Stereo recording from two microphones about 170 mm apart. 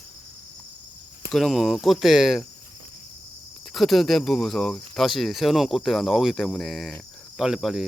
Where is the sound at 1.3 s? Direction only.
Centre (ahead or behind).